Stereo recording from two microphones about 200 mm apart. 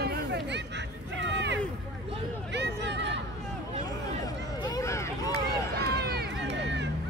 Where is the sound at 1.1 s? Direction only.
65° right (ahead or behind).